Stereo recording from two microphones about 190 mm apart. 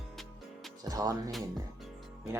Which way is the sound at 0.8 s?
20° right (ahead or behind).